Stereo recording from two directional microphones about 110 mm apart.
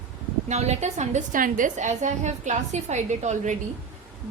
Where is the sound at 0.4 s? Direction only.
90° right.